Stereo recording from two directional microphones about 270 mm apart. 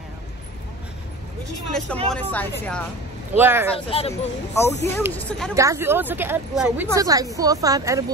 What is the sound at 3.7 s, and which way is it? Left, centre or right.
Speech, left.